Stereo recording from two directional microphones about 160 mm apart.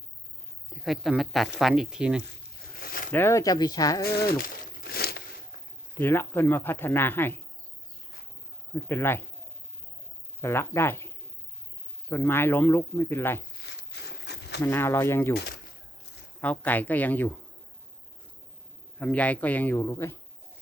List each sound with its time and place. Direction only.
0.7 s speech: centre (ahead or behind)
2.8 s a sound: 60° left (ahead or behind)
3.1 s speech: 15° left (ahead or behind)
4.0 s a sound: 75° left (ahead or behind)
5.9 s speech: 15° left (ahead or behind)
8.7 s speech: 15° left (ahead or behind)
10.4 s speech: 15° left (ahead or behind)
13.7 s a sound: 90° left
14.6 s speech: 15° left (ahead or behind)
16.4 s speech: 10° left (ahead or behind)
18.9 s speech: 10° left (ahead or behind)